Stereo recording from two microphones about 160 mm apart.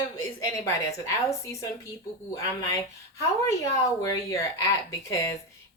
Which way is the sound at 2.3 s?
20° left (ahead or behind).